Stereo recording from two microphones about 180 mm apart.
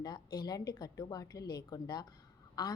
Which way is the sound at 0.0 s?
25° left (ahead or behind).